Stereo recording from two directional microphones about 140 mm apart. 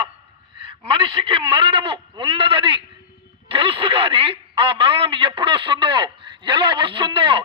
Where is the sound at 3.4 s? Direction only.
40° right (ahead or behind).